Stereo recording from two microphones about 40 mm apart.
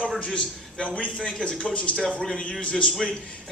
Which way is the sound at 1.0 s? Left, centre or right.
Left.